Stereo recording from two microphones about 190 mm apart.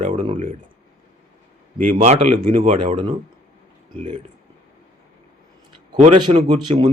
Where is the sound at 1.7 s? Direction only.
40° right (ahead or behind).